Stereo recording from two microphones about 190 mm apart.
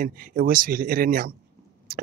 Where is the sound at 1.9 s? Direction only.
55° right (ahead or behind).